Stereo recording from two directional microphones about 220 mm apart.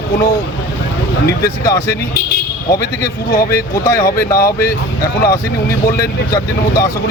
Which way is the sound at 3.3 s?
45° left (ahead or behind).